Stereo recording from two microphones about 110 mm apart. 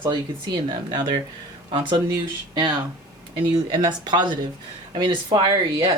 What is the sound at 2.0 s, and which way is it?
Speech, 35° right (ahead or behind).